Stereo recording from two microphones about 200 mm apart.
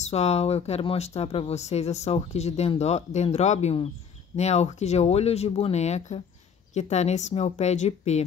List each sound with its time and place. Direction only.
0.0 s speech: 30° left (ahead or behind)